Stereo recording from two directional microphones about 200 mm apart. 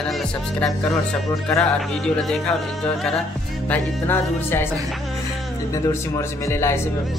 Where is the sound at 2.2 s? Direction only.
Centre (ahead or behind).